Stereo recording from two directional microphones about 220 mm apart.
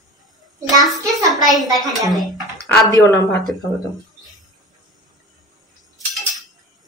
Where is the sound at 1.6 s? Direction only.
15° right (ahead or behind).